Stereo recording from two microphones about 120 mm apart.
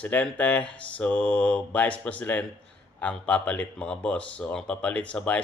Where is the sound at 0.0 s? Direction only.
10° left (ahead or behind).